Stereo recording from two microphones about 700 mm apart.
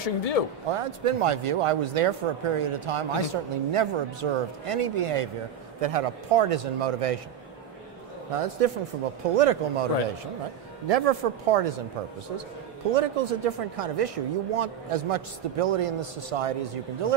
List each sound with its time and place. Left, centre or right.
0.0 s speech: left
0.7 s speech: right
8.3 s speech: right
10.9 s speech: right
12.9 s speech: right